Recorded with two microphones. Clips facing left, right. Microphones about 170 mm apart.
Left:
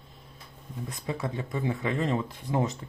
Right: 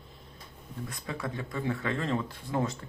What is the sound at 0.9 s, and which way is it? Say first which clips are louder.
Speech: left 4 dB; 20° left (ahead or behind).